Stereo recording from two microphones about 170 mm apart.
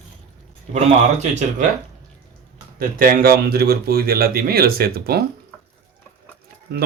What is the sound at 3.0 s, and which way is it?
Speech, 60° right (ahead or behind).